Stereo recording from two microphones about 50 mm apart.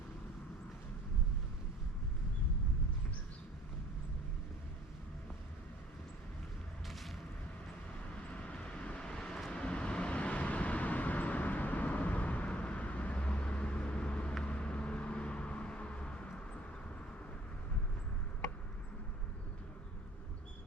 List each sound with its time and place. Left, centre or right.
8.3 s vehicle: left